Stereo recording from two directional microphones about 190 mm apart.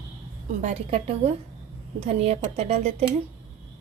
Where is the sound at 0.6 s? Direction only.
35° right (ahead or behind).